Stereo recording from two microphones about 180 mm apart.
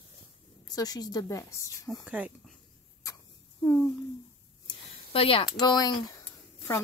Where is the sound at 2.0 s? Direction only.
5° right (ahead or behind).